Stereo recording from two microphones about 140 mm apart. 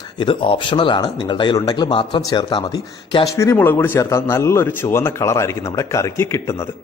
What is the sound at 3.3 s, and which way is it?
A man's voice, 20° left (ahead or behind).